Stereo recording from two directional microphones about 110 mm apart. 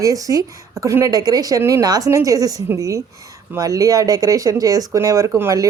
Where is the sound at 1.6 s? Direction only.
25° right (ahead or behind).